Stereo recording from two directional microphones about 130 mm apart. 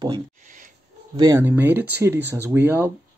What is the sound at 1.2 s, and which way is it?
Speech, 30° right (ahead or behind).